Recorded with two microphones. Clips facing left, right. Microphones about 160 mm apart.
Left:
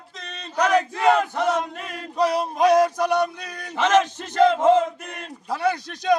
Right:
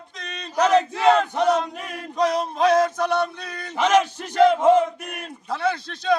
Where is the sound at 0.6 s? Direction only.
25° right (ahead or behind).